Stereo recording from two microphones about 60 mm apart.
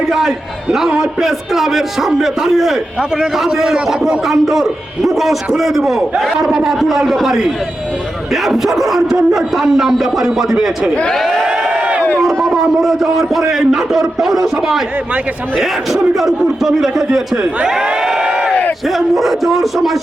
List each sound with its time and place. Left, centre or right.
0.1 s a man's voice: centre
11.1 s a man's voice: centre
11.4 s crowd: centre
12.5 s a man's voice: centre
15.5 s a man's voice: centre
17.7 s crowd: centre
18.9 s a man's voice: centre